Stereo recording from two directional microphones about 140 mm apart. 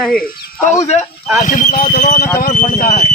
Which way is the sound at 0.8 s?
50° left (ahead or behind).